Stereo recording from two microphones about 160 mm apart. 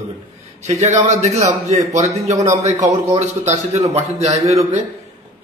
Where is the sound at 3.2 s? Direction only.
45° right (ahead or behind).